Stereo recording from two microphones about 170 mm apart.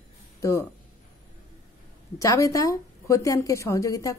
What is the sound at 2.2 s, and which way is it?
A woman's voice, 20° left (ahead or behind).